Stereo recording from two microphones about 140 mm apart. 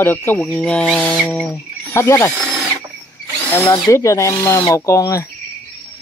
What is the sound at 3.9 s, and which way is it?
Speech, 20° left (ahead or behind).